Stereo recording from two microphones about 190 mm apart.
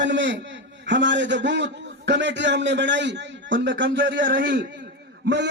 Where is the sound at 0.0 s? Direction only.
70° right (ahead or behind).